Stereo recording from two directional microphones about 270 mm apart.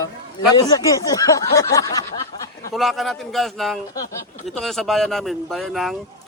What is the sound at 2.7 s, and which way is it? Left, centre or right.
A man's voice, centre.